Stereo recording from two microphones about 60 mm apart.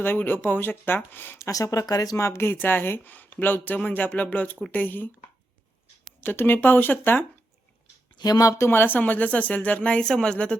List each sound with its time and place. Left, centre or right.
0.0 s speech: left
1.4 s speech: left
2.2 s speech: left
6.2 s speech: left
8.2 s speech: left
8.5 s speech: left; by 10.6 s centre